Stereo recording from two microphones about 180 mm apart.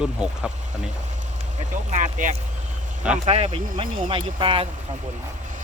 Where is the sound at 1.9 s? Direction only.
45° right (ahead or behind); by 4.6 s 30° right (ahead or behind).